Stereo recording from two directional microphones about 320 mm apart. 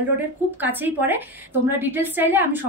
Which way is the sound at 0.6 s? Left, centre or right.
Centre.